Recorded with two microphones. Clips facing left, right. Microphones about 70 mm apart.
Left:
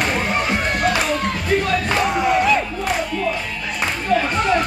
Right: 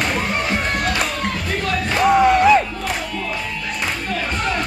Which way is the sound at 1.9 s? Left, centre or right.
Centre.